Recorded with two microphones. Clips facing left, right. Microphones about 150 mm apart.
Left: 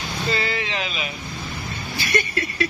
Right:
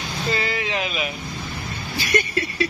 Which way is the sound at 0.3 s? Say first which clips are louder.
Even; 30° left (ahead or behind).